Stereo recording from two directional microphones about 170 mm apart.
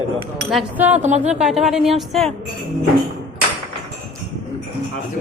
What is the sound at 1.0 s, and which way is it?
Speech, 40° right (ahead or behind).